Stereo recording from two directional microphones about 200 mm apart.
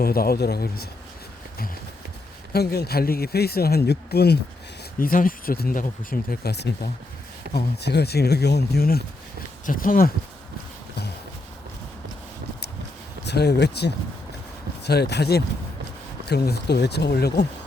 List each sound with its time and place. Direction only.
0.0 s speech: 50° left (ahead or behind)
2.5 s speech: 50° left (ahead or behind)
13.2 s speech: 55° left (ahead or behind)